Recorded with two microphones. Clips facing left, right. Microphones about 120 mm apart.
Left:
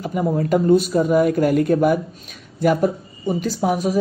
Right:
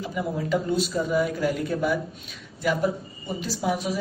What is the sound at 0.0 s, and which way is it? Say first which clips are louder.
Speech: left 7 dB; 50° left (ahead or behind).